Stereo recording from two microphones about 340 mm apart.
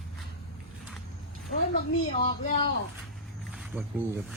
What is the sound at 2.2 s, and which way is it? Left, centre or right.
Speech, centre.